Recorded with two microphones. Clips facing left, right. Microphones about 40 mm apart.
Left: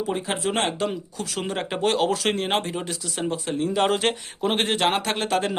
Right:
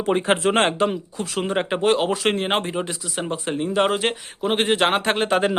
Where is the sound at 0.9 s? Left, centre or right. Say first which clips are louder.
Right 3 dB; right.